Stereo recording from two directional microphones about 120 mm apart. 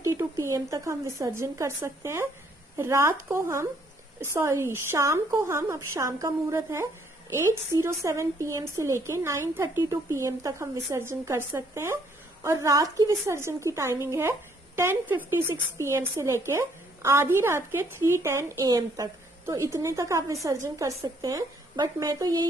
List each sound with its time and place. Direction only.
0.0 s a woman's voice: 25° right (ahead or behind)